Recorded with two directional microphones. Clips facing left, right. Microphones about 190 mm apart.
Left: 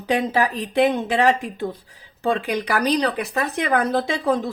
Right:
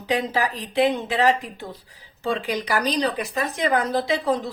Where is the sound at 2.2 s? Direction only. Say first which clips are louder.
Left 3 dB; 55° left (ahead or behind).